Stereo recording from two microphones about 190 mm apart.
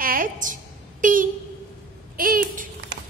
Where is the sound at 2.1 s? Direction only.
50° right (ahead or behind).